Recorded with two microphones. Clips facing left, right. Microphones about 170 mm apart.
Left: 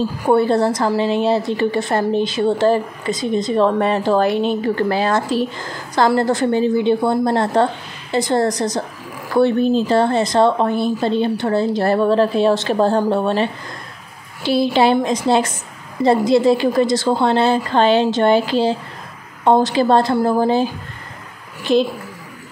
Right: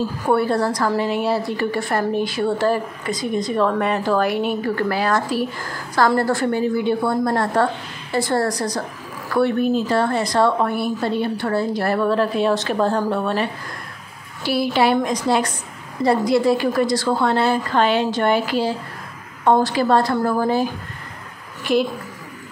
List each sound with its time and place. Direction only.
0.2 s a woman's voice: 20° left (ahead or behind)
21.7 s a woman's voice: 25° left (ahead or behind)